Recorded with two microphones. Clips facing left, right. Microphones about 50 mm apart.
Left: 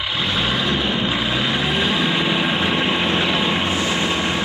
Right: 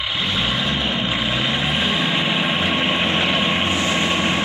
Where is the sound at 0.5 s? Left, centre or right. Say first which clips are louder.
Left 1 dB; right.